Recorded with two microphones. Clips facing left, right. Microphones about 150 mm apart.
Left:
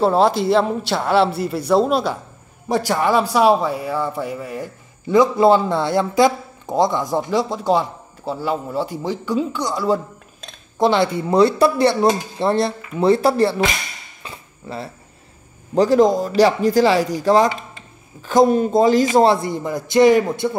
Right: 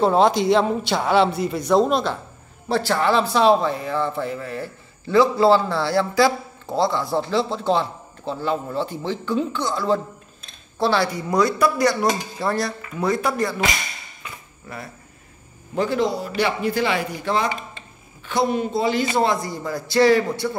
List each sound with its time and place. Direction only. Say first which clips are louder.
0.0 s a man's voice: left 1 dB; 5° left (ahead or behind); by 13.6 s 30° left (ahead or behind)
14.2 s cutlery: left 5 dB; 30° left (ahead or behind)
15.7 s a man's voice: left 8 dB; 35° left (ahead or behind)
19.3 s speech: left 4 dB; 25° left (ahead or behind)